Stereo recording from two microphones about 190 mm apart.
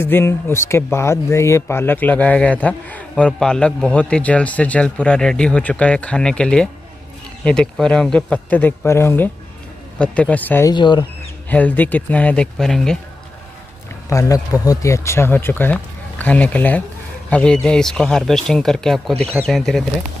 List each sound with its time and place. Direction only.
0.0 s speech: 10° left (ahead or behind)
10.7 s speech: 25° left (ahead or behind)
11.4 s speech: 10° left (ahead or behind)
14.0 s speech: 15° left (ahead or behind)